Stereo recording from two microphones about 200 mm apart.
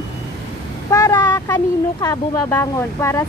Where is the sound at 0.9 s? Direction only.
20° left (ahead or behind).